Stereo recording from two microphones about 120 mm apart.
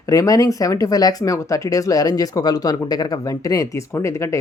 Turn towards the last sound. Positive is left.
turn(degrees=25)  # may be behind; listen again after turning